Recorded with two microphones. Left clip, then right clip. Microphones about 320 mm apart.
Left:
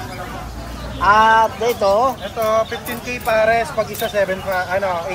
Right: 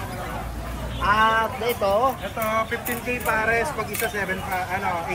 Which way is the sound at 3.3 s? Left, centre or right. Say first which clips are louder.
Left 7 dB; left.